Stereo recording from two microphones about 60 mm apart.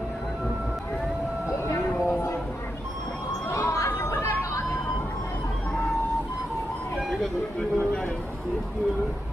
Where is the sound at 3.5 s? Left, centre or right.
Left.